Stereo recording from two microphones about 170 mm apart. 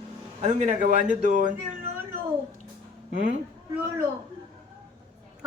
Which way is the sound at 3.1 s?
50° right (ahead or behind).